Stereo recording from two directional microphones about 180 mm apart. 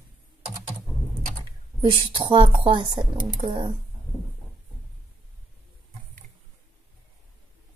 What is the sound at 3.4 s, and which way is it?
Speech, 40° right (ahead or behind).